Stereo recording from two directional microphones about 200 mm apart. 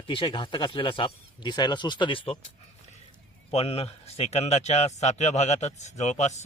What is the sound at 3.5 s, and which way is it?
A man's voice, 30° left (ahead or behind).